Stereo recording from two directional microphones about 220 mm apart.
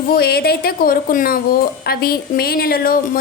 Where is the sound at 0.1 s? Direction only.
45° left (ahead or behind).